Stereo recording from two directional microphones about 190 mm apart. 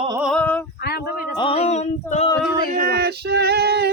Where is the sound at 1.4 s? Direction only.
30° left (ahead or behind).